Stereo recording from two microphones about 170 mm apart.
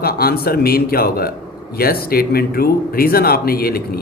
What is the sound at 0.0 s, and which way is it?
A man's voice, 65° left (ahead or behind).